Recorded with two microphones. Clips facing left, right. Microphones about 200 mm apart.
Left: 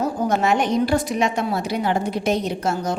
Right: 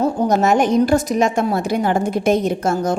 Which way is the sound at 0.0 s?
40° right (ahead or behind).